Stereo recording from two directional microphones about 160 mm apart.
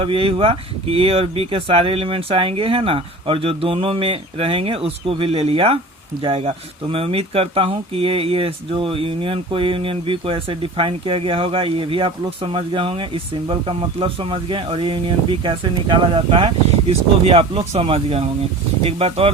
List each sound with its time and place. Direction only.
0.0 s speech: 35° right (ahead or behind)